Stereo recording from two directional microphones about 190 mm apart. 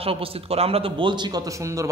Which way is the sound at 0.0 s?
30° right (ahead or behind).